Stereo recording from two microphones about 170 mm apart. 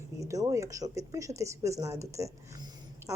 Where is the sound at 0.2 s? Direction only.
20° right (ahead or behind).